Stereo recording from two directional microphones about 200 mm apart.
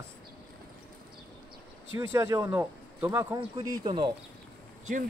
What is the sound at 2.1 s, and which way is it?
A man's voice, 15° right (ahead or behind).